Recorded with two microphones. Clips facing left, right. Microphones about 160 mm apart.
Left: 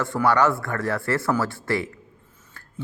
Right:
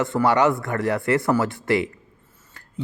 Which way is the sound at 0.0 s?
20° right (ahead or behind).